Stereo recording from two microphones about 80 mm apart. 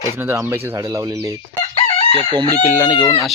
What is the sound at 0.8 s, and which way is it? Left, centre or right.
Speech, right.